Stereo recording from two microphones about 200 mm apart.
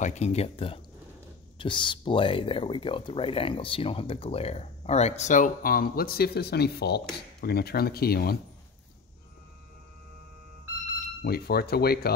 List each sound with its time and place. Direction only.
0.0 s speech: 35° left (ahead or behind); by 8.4 s 50° left (ahead or behind)
11.2 s speech: 50° left (ahead or behind)